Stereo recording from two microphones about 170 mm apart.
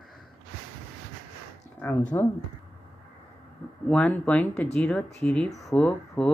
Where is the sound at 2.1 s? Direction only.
20° left (ahead or behind).